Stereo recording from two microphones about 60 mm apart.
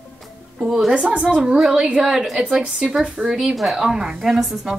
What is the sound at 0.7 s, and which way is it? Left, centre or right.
A woman's voice, centre.